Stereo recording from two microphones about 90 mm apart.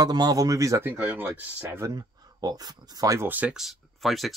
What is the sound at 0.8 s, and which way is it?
Speech, 25° right (ahead or behind).